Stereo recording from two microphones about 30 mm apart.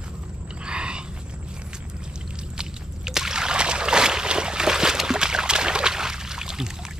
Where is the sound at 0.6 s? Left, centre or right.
Right.